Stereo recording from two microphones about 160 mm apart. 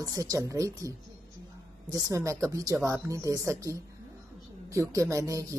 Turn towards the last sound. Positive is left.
turn(degrees=-20)  # may be behind; listen again after turning